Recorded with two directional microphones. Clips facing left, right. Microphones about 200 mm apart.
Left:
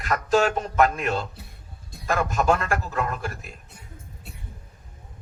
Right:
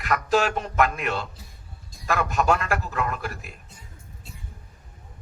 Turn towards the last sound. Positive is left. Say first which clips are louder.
# left 1 dB
turn(degrees=60)  # may be behind; listen again after turning